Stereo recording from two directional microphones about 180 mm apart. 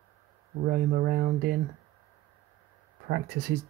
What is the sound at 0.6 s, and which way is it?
Speech, 45° right (ahead or behind).